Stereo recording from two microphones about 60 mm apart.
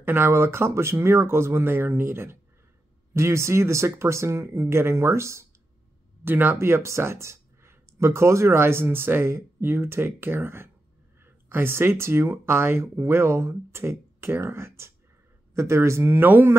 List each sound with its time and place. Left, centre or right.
0.0 s speech: right
3.1 s speech: right
6.2 s speech: right
6.6 s speech: right